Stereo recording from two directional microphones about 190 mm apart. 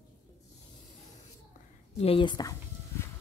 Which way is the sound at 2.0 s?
30° left (ahead or behind).